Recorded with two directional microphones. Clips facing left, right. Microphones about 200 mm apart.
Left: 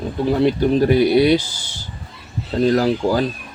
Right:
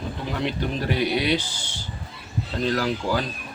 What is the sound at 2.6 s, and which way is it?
Speech, 40° left (ahead or behind).